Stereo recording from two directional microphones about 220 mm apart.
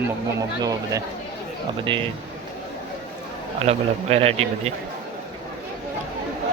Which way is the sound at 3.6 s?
25° right (ahead or behind).